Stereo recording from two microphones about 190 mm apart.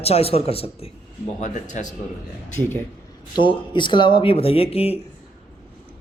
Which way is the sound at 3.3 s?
25° left (ahead or behind).